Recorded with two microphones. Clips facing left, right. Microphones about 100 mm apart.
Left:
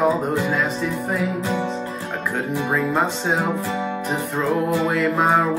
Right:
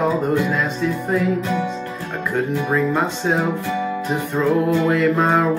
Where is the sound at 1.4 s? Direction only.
25° left (ahead or behind).